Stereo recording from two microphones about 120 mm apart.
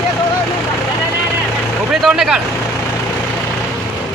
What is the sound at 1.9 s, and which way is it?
Vehicle, centre (ahead or behind).